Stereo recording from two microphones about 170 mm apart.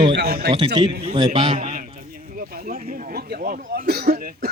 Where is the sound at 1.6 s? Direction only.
45° right (ahead or behind).